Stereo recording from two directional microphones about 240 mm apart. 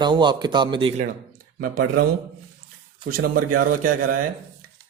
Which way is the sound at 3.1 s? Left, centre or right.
Right.